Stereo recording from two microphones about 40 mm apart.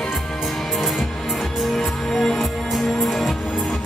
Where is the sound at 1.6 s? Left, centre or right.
Centre.